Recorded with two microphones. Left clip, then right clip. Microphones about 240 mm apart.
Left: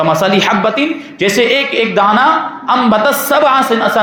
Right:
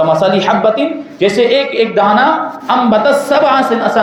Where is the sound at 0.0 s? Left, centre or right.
Left.